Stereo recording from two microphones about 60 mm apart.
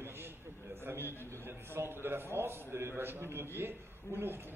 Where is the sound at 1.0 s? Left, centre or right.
Left.